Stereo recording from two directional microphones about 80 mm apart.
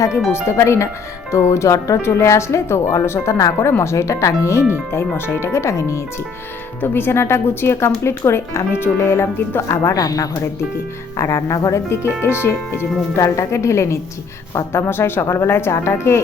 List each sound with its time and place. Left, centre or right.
0.3 s speech: left
6.8 s speech: left
12.2 s speech: left